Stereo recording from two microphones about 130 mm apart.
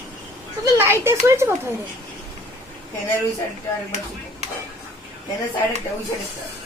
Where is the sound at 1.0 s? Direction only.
20° right (ahead or behind).